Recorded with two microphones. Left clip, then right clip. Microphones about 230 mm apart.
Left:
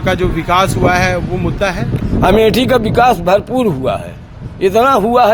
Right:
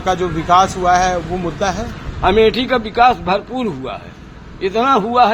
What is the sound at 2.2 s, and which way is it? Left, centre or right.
Speech, left.